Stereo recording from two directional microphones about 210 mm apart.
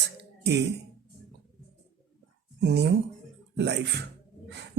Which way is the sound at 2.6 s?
55° right (ahead or behind).